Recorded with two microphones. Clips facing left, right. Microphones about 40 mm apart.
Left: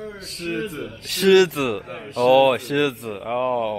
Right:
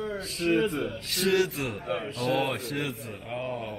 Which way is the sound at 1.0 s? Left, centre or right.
Left.